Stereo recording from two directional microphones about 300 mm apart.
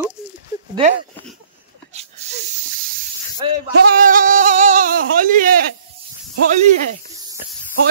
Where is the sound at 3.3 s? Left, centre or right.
Centre.